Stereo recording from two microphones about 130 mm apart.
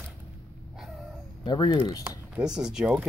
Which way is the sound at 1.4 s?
30° left (ahead or behind).